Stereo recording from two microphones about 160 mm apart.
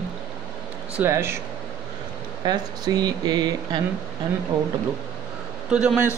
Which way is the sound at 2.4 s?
25° right (ahead or behind).